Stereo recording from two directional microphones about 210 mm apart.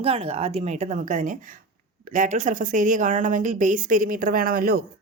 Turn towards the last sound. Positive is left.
turn(degrees=-45)  # may be behind; listen again after turning